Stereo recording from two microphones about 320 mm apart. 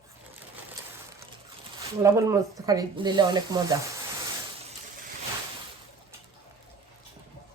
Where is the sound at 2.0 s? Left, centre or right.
Centre.